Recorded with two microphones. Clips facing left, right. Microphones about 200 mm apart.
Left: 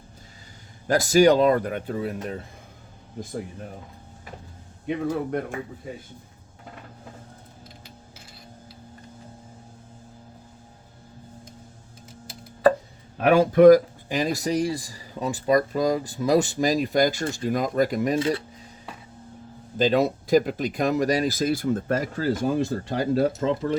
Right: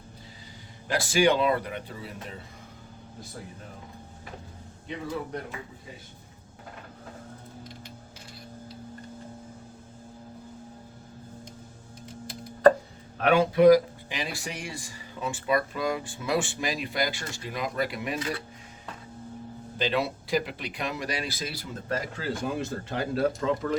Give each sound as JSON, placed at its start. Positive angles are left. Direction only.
{"t": 0.9, "sound": "speech", "side_deg": 40}
{"t": 4.9, "sound": "speech", "side_deg": 55}
{"t": 13.3, "sound": "speech", "side_deg": 45}
{"t": 18.2, "sound": "speech", "side_deg": 25}
{"t": 19.8, "sound": "speech", "side_deg": 40}
{"t": 23.4, "sound": "speech", "side_deg": 25}